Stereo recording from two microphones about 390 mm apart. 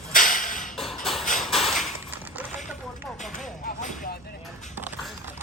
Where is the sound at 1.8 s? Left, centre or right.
Centre.